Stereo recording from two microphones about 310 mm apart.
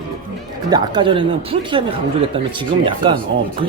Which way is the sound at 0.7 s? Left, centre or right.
Centre.